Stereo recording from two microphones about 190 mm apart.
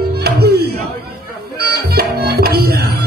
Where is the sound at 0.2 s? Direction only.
55° right (ahead or behind).